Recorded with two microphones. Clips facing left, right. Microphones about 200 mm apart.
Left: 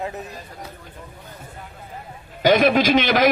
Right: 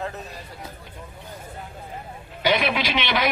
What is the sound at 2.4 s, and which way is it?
Speech, 45° left (ahead or behind).